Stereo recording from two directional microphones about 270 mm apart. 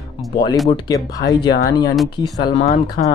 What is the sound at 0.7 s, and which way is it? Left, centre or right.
Speech, centre.